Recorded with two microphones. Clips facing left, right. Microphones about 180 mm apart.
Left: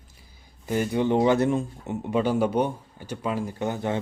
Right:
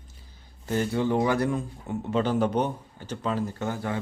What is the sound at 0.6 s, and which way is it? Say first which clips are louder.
Speech: left 2 dB; 15° left (ahead or behind).